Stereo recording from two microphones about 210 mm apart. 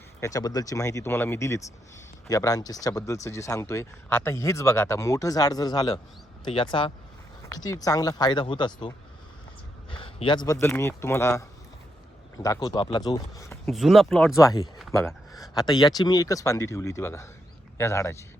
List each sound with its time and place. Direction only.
0.2 s speech: 15° left (ahead or behind)
13.7 s speech: centre (ahead or behind)
14.3 s speech: 15° left (ahead or behind)